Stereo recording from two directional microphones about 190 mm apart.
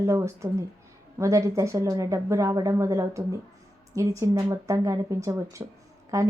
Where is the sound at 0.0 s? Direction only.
15° right (ahead or behind).